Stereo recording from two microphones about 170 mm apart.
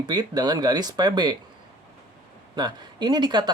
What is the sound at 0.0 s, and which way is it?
Speech, 25° right (ahead or behind).